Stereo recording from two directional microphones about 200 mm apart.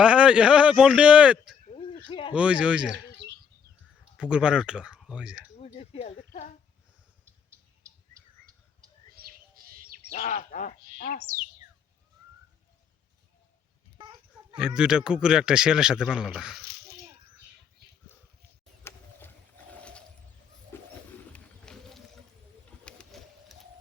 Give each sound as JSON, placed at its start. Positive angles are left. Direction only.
{"t": 0.0, "sound": "speech", "side_deg": -5}
{"t": 2.0, "sound": "speech", "side_deg": 25}
{"t": 2.3, "sound": "speech", "side_deg": -5}
{"t": 4.2, "sound": "speech", "side_deg": -5}
{"t": 5.5, "sound": "a sound", "side_deg": 30}
{"t": 9.1, "sound": "bird", "side_deg": -45}
{"t": 10.1, "sound": "speech", "side_deg": 45}
{"t": 10.9, "sound": "speech", "side_deg": 50}
{"t": 14.8, "sound": "speech", "side_deg": -5}
{"t": 18.8, "sound": "a sound", "side_deg": 10}
{"t": 21.3, "sound": "run", "side_deg": 5}
{"t": 22.8, "sound": "printer", "side_deg": 5}